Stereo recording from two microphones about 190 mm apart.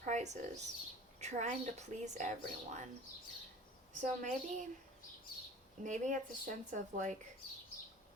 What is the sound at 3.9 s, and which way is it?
Speech, 40° right (ahead or behind).